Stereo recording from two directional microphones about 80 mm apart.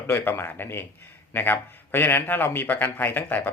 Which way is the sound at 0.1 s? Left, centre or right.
Left.